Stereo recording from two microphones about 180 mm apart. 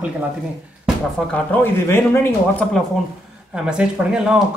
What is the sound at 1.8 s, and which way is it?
Speech, 15° left (ahead or behind).